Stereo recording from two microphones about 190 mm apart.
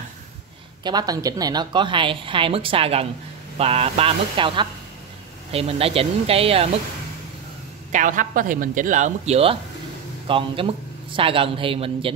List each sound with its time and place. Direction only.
0.8 s a woman's voice: 20° right (ahead or behind)
7.9 s a woman's voice: 45° right (ahead or behind); by 12.1 s 30° right (ahead or behind)